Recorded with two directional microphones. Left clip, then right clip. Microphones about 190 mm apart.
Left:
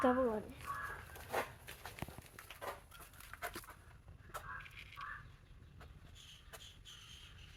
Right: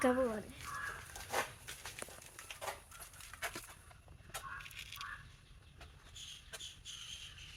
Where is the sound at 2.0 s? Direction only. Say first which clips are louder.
Even; 5° left (ahead or behind).